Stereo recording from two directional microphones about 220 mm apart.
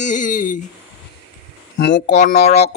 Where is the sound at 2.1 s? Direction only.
30° left (ahead or behind).